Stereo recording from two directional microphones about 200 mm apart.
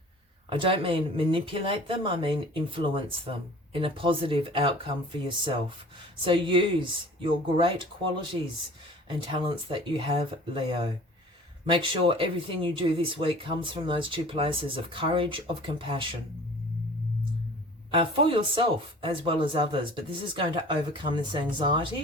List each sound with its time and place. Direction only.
0.5 s speech: 25° right (ahead or behind)
11.6 s speech: 25° right (ahead or behind)
17.9 s speech: 25° right (ahead or behind)